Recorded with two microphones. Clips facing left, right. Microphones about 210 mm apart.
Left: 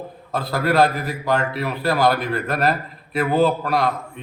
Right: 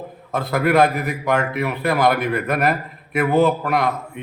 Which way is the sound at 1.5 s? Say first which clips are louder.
Right 1 dB; 20° right (ahead or behind).